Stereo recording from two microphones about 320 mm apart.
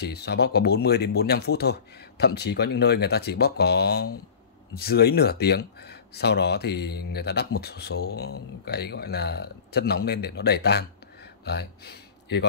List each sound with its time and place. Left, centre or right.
0.0 s speech: left